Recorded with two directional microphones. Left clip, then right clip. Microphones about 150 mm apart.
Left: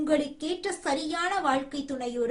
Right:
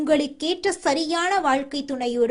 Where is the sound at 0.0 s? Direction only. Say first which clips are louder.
Right 6 dB; 60° right (ahead or behind).